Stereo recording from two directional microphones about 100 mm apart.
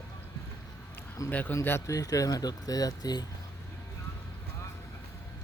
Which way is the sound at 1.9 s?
35° left (ahead or behind).